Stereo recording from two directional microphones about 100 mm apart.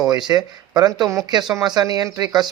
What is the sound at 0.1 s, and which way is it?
Speech, 40° right (ahead or behind).